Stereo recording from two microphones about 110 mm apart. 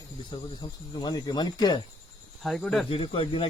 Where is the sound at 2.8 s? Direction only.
55° left (ahead or behind).